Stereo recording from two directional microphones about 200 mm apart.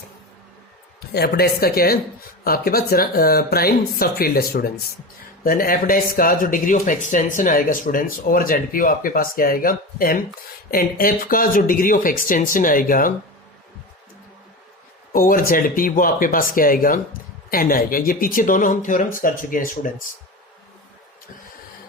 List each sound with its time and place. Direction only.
1.1 s speech: 50° left (ahead or behind)
15.1 s speech: 45° left (ahead or behind)